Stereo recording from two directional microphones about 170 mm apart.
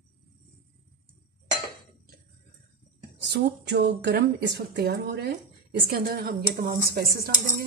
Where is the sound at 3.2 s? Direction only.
85° right.